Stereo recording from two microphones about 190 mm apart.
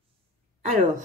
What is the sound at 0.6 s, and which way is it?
Speech, 40° right (ahead or behind).